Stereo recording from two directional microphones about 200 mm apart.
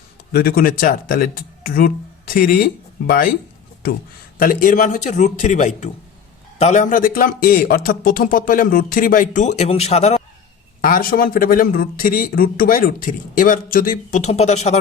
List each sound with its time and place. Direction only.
0.3 s a man's voice: 50° left (ahead or behind)
4.4 s a man's voice: 45° left (ahead or behind)
10.8 s a man's voice: 45° left (ahead or behind)